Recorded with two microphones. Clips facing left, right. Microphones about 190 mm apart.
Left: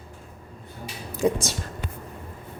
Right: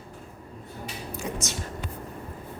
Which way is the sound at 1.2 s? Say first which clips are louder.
Left 11 dB; 35° left (ahead or behind).